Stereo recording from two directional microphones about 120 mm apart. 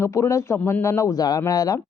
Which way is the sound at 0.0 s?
25° left (ahead or behind).